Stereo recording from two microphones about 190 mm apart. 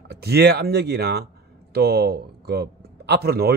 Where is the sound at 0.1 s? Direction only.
60° right (ahead or behind).